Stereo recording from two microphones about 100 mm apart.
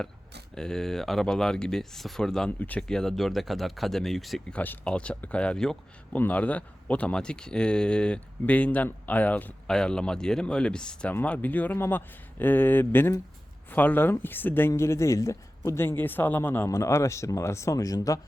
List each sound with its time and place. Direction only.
0.5 s speech: 5° left (ahead or behind)
2.6 s speech: 15° left (ahead or behind)
2.8 s speech: 5° left (ahead or behind)
4.5 s speech: 15° left (ahead or behind); by 18.2 s 35° left (ahead or behind)